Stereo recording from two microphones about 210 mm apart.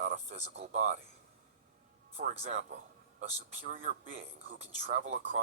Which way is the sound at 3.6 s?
35° right (ahead or behind).